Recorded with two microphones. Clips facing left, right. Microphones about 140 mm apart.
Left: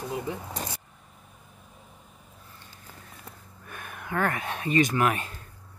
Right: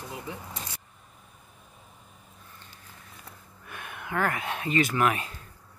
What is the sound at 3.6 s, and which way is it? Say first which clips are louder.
Speech: even; 40° left (ahead or behind).